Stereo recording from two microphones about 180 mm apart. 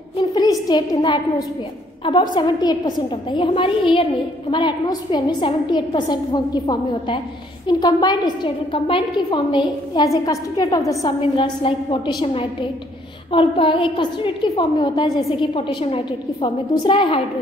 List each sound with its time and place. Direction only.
0.2 s a woman's voice: 20° left (ahead or behind)
11.3 s a woman's voice: 30° left (ahead or behind)
13.3 s a woman's voice: 30° left (ahead or behind)